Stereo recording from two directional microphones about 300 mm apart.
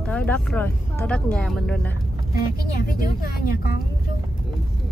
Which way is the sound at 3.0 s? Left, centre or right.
Left.